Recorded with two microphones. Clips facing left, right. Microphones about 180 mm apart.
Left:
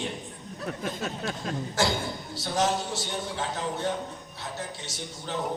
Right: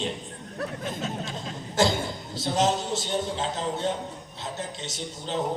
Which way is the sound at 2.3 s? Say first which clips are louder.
Right 2 dB; 20° right (ahead or behind).